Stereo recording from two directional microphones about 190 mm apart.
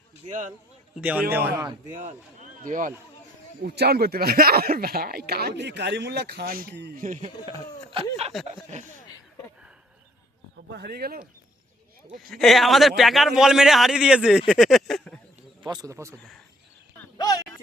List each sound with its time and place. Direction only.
0.3 s speech: 40° right (ahead or behind)
0.9 s speech: 5° right (ahead or behind)
2.6 s speech: 45° right (ahead or behind)
3.6 s speech: 55° right (ahead or behind)
7.0 s speech: 40° right (ahead or behind)
7.9 s speech: 30° right (ahead or behind)
10.7 s speech: 60° right (ahead or behind)
12.3 s a man's voice: centre (ahead or behind)
15.6 s speech: 20° right (ahead or behind)
16.1 s a man's voice: 5° left (ahead or behind)